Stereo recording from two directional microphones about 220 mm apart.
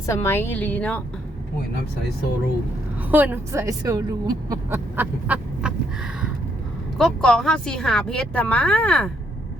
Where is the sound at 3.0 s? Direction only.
10° right (ahead or behind).